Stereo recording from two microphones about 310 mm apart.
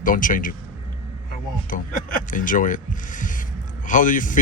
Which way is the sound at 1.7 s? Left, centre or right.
Left.